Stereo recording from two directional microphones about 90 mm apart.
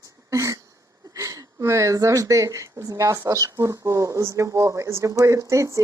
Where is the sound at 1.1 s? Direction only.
40° right (ahead or behind).